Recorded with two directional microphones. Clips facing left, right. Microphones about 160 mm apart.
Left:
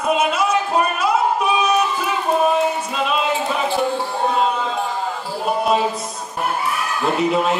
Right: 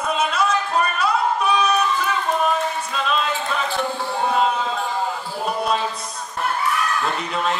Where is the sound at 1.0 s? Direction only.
5° left (ahead or behind).